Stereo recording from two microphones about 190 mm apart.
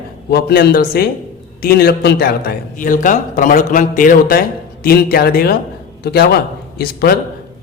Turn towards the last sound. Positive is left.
turn(degrees=55)  # may be behind; listen again after turning